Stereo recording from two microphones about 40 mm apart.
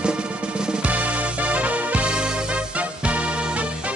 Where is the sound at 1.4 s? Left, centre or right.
Right.